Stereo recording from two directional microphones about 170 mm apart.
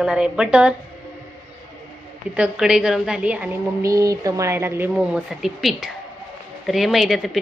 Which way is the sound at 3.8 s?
20° right (ahead or behind).